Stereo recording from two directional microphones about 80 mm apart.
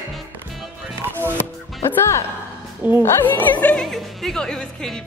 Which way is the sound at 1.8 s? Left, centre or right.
Left.